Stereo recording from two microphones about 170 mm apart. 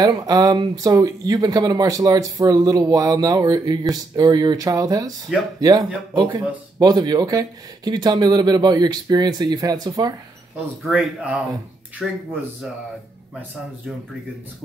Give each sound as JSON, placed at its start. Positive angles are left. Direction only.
{"t": 0.0, "sound": "speech", "side_deg": -20}
{"t": 10.9, "sound": "speech", "side_deg": -5}